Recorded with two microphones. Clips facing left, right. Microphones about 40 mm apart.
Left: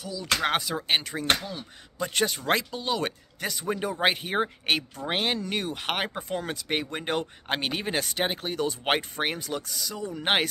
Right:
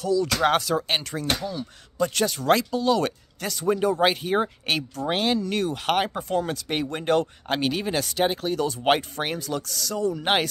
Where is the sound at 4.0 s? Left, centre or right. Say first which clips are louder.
Right 3 dB; left.